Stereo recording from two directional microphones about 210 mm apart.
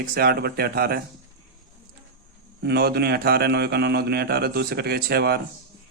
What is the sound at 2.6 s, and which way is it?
Speech, 50° right (ahead or behind).